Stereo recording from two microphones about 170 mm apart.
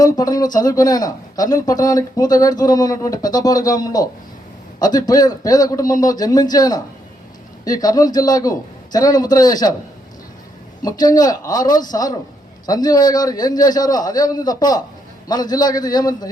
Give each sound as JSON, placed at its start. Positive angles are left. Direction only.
{"t": 0.0, "sound": "a man's voice", "side_deg": 20}
{"t": 10.8, "sound": "a man's voice", "side_deg": 20}